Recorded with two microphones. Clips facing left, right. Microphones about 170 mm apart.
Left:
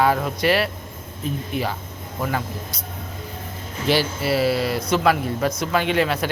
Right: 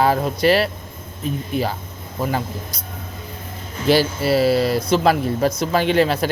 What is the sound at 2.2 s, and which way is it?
Speech, 30° right (ahead or behind).